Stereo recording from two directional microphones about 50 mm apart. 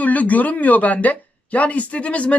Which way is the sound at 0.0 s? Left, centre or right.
Left.